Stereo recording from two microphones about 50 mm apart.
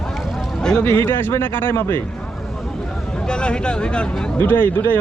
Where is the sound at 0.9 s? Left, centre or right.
Left.